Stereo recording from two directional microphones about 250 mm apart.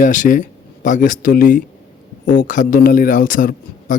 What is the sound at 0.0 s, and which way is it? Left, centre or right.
A man's voice, left.